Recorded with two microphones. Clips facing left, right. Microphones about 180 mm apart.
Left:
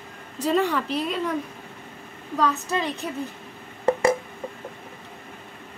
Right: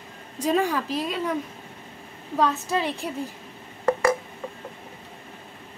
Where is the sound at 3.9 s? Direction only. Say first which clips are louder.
Left 1 dB; 25° left (ahead or behind).